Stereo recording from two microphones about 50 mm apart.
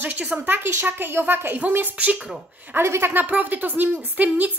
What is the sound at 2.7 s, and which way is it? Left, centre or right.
Speech, right.